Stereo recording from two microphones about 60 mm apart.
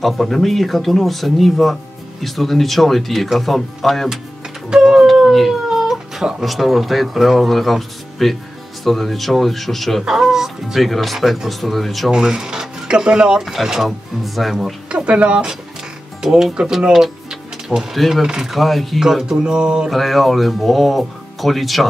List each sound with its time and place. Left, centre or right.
0.0 s speech: centre
4.6 s a sound: centre
5.3 s speech: centre
10.0 s speech: centre
12.1 s speech: centre
14.9 s speech: centre
16.2 s speech: centre
16.9 s mechanisms: centre
17.9 s speech: centre
19.9 s speech: centre